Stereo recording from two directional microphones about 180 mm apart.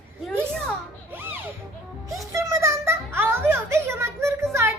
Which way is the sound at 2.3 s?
15° right (ahead or behind).